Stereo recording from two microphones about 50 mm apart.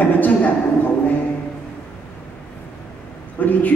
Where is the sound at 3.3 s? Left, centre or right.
Left.